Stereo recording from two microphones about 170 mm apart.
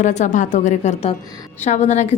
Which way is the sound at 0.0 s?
45° left (ahead or behind).